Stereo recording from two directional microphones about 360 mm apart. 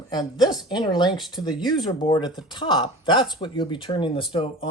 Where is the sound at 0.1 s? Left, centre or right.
Centre.